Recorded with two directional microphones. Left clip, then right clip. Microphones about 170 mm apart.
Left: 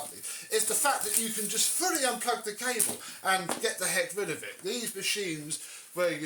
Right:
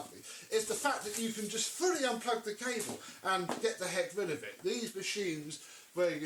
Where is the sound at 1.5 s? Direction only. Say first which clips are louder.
Left 4 dB; 25° left (ahead or behind).